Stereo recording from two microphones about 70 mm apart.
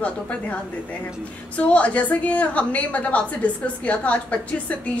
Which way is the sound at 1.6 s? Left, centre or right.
Centre.